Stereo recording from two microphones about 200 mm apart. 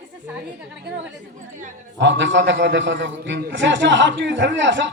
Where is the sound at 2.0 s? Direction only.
65° right (ahead or behind).